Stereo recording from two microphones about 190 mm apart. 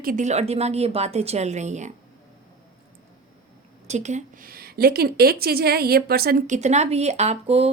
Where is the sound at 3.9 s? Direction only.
35° right (ahead or behind).